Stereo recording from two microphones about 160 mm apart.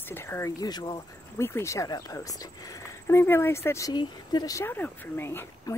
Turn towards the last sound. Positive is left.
turn(degrees=15)  # may be behind; listen again after turning